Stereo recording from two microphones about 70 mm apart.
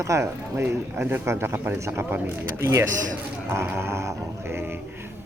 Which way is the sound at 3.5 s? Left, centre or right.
Right.